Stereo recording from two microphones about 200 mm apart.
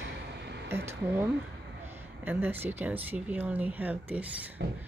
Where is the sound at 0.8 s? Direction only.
10° right (ahead or behind).